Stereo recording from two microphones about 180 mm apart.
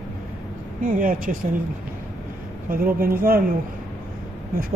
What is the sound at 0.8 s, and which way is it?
Speech, 50° right (ahead or behind).